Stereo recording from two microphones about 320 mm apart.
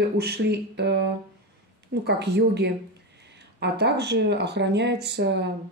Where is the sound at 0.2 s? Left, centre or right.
Right.